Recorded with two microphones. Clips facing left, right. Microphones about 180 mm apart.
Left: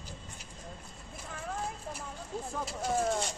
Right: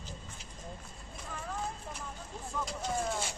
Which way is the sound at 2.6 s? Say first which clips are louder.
Left 3 dB; 5° left (ahead or behind).